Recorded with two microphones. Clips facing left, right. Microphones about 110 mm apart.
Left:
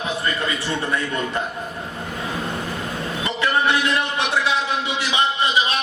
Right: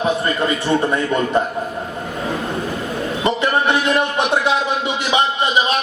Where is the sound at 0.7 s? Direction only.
35° right (ahead or behind).